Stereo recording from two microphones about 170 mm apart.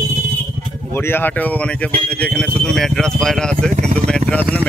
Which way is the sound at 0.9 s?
15° left (ahead or behind).